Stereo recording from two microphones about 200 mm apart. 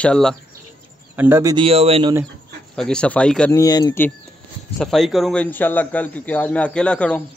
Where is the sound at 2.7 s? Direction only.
5° left (ahead or behind).